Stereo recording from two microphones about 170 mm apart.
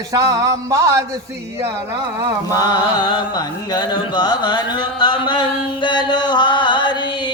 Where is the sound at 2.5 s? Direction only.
25° left (ahead or behind).